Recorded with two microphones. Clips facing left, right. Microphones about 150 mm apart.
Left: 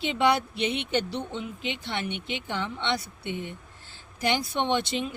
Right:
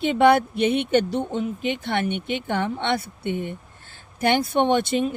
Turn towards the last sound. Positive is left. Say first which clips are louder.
# right 7 dB
turn(degrees=-50)  # may be behind; listen again after turning